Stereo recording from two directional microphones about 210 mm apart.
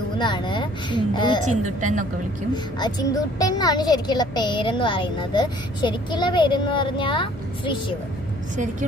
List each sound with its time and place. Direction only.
0.2 s a woman's voice: 20° left (ahead or behind)
1.4 s a woman's voice: 35° right (ahead or behind)
2.5 s a woman's voice: 20° left (ahead or behind)